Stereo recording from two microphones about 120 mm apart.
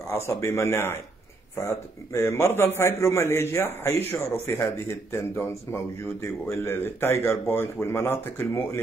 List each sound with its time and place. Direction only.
0.1 s a man's voice: 20° left (ahead or behind)